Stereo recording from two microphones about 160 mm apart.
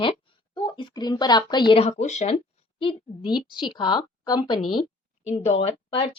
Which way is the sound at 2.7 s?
30° left (ahead or behind).